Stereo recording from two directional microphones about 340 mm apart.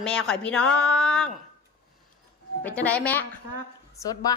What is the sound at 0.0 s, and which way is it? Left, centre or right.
A woman's voice, centre.